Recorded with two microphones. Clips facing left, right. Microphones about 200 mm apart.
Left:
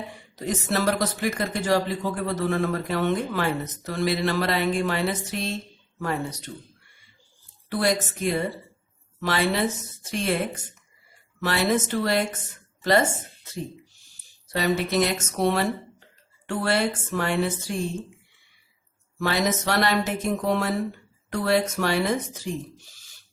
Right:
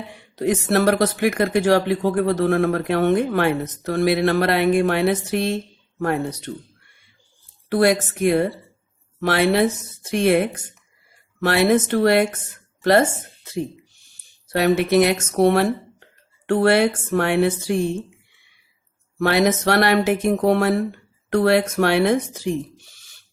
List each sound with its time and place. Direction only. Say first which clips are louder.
0.2 s speech: right 10 dB; 65° right (ahead or behind)
7.7 s speech: right 7 dB; 60° right (ahead or behind)
14.5 s speech: right 7 dB; 65° right (ahead or behind)
19.2 s speech: right 7 dB; 65° right (ahead or behind)